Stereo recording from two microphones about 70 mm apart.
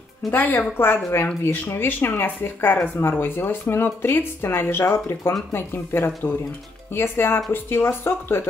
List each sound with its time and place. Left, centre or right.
0.3 s speech: left